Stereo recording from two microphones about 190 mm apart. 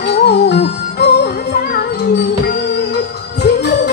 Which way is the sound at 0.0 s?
60° left (ahead or behind).